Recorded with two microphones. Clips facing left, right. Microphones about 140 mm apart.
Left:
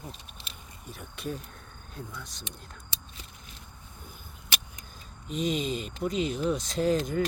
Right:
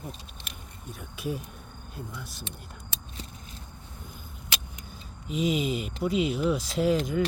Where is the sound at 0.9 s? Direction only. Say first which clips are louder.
Right 3 dB; centre (ahead or behind).